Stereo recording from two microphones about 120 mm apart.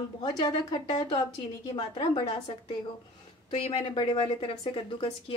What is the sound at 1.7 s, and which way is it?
Speech, 45° left (ahead or behind).